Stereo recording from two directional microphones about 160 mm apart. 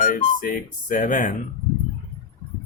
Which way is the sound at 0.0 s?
50° left (ahead or behind).